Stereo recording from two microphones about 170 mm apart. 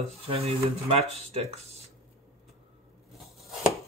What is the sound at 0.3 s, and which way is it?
Speech, 35° right (ahead or behind).